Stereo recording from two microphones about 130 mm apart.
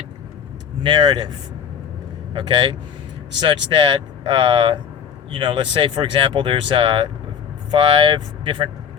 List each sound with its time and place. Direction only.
0.8 s speech: 35° right (ahead or behind)